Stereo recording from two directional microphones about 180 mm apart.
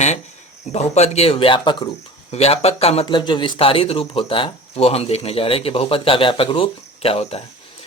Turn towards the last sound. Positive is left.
turn(degrees=30)  # may be behind; listen again after turning